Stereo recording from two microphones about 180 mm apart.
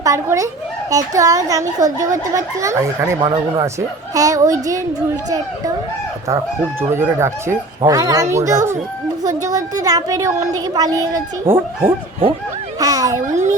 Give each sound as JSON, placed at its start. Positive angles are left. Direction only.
{"t": 0.0, "sound": "a child's voice", "side_deg": -20}
{"t": 6.9, "sound": "a child's voice", "side_deg": -15}
{"t": 13.2, "sound": "speech", "side_deg": -40}